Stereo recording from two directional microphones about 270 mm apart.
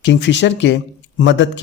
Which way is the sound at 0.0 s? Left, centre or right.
Left.